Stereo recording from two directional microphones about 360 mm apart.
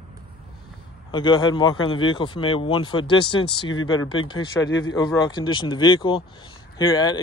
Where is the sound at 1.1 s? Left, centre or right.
Centre.